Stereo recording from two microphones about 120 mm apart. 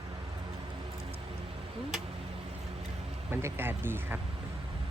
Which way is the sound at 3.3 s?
20° right (ahead or behind).